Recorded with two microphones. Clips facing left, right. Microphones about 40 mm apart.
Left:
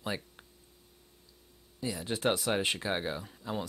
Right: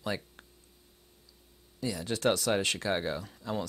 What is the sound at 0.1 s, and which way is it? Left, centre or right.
Speech, centre.